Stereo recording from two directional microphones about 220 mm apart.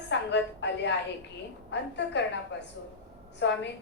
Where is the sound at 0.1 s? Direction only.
55° left (ahead or behind).